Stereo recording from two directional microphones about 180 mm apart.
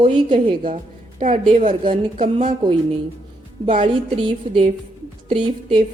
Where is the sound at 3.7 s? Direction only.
30° right (ahead or behind).